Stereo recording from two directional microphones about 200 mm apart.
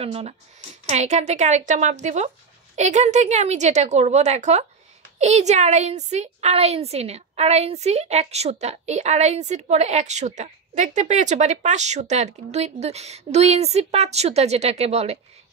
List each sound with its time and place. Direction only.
0.0 s a woman's voice: 30° right (ahead or behind)